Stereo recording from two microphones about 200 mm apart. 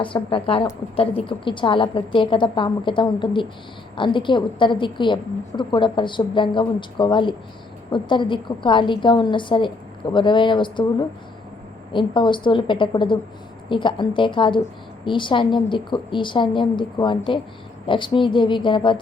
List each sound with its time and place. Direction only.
0.0 s a woman's voice: 25° left (ahead or behind)
11.9 s a woman's voice: 25° left (ahead or behind)